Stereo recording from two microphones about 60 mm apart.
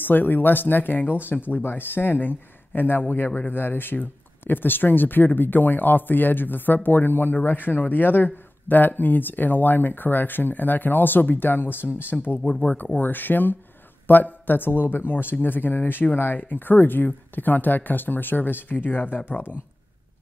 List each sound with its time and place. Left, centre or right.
0.0 s speech: left